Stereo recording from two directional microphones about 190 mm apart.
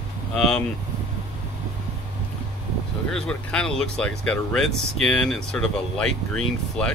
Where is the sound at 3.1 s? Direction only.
5° left (ahead or behind).